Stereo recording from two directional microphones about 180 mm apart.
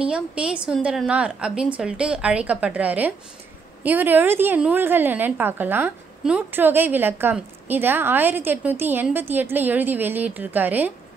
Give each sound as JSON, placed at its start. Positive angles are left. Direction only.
{"t": 0.0, "sound": "a woman's voice", "side_deg": -5}